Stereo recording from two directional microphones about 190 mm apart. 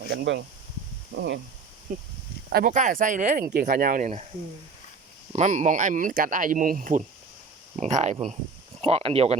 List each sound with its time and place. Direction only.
0.1 s speech: 60° right (ahead or behind)
2.5 s speech: 45° right (ahead or behind)
5.3 s speech: 40° right (ahead or behind)